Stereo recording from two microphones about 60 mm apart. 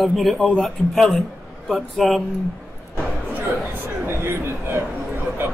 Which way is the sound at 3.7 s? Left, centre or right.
Right.